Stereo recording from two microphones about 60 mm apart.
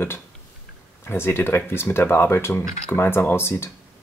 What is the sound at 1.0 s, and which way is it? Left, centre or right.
Speech, left.